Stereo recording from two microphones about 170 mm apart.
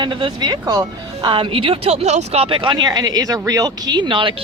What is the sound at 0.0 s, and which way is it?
Speech, 30° right (ahead or behind).